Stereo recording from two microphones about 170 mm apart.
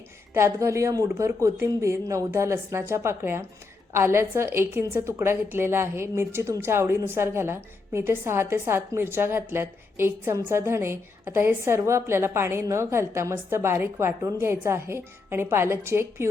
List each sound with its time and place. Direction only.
0.3 s a woman's voice: 15° right (ahead or behind)